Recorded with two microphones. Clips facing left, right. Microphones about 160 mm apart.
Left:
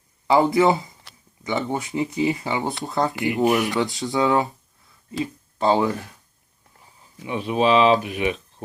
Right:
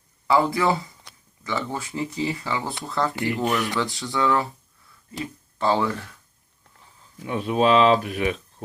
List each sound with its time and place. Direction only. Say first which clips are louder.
0.3 s speech: left 4 dB; 25° left (ahead or behind)
7.2 s speech: even; centre (ahead or behind)